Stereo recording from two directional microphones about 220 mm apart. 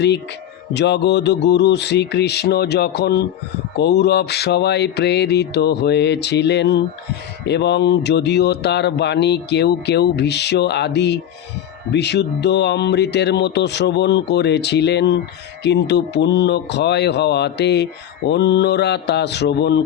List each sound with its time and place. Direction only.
0.7 s speech: 50° left (ahead or behind)